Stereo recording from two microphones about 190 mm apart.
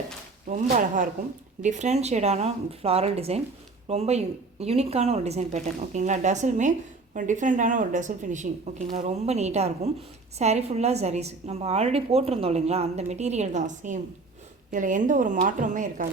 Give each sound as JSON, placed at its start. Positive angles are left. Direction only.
{"t": 0.4, "sound": "a woman's voice", "side_deg": -40}